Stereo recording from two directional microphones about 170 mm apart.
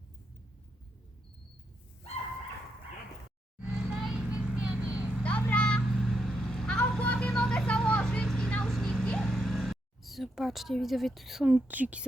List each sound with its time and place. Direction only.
3.6 s vehicle: 5° right (ahead or behind)
5.2 s vehicle: 5° left (ahead or behind); by 12.0 s 10° right (ahead or behind)